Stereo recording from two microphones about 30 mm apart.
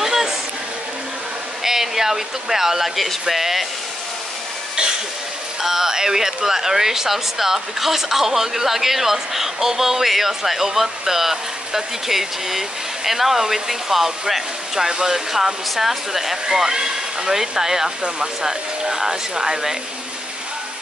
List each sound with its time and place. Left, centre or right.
0.0 s a sound: centre
1.6 s speech: centre
5.6 s speech: centre